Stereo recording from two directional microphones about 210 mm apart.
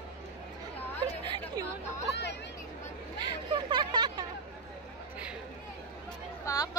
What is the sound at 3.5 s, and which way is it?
Speech, 20° right (ahead or behind).